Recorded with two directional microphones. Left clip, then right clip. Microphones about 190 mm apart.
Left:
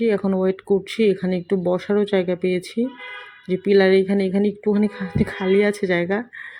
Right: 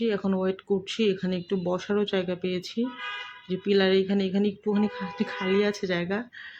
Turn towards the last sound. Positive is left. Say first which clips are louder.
# left 7 dB
turn(degrees=20)  # may be behind; listen again after turning